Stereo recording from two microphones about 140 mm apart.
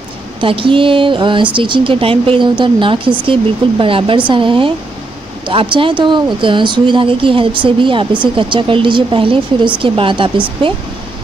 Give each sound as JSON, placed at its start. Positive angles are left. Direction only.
{"t": 0.4, "sound": "speech", "side_deg": -35}